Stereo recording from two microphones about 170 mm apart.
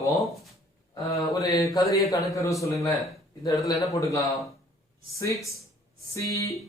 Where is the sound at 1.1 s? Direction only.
20° left (ahead or behind).